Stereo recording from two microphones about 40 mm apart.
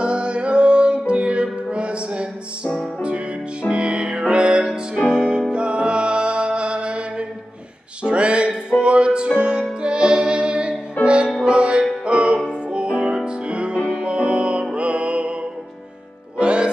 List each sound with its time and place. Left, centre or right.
0.0 s music: right
8.0 s a sound: right
8.7 s music: right
16.3 s music: right